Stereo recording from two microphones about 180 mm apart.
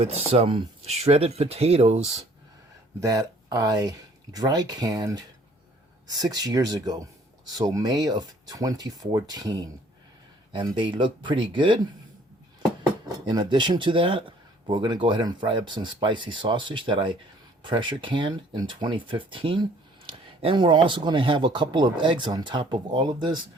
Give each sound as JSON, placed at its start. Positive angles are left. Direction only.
{"t": 0.0, "sound": "speech", "side_deg": -35}
{"t": 3.0, "sound": "speech", "side_deg": -20}
{"t": 13.2, "sound": "speech", "side_deg": -25}